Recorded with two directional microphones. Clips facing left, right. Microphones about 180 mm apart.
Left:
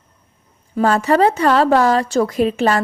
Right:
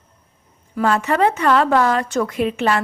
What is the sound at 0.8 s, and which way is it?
Speech, 35° left (ahead or behind).